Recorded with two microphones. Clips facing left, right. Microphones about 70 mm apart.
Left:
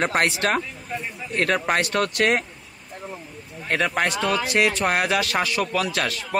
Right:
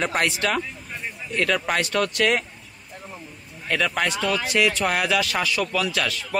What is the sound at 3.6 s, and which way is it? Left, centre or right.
A man's voice, left.